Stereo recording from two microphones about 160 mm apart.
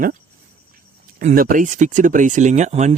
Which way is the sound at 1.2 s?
55° right (ahead or behind).